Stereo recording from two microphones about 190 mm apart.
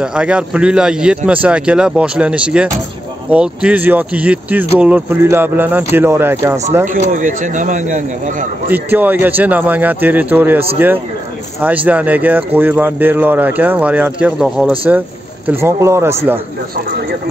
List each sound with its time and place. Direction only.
0.0 s a man's voice: 5° right (ahead or behind)
6.9 s speech: 45° right (ahead or behind)
8.6 s speech: 10° right (ahead or behind)
11.6 s speech: 10° right (ahead or behind)